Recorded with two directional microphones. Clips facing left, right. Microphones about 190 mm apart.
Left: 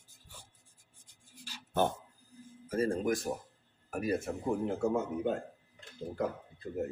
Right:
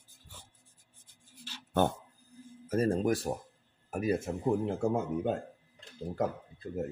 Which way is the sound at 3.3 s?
35° right (ahead or behind).